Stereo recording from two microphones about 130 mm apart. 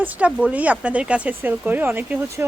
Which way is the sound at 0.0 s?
10° right (ahead or behind).